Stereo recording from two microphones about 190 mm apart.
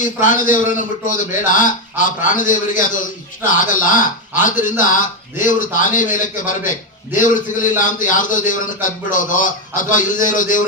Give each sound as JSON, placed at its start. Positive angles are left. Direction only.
{"t": 0.2, "sound": "a man's voice", "side_deg": 45}